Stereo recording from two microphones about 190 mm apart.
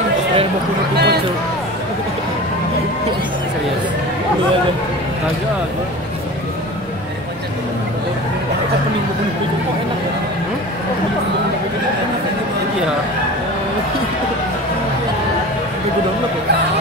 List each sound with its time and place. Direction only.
0.9 s speech: 60° right (ahead or behind)